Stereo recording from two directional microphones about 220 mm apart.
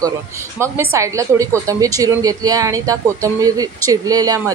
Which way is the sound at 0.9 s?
15° right (ahead or behind).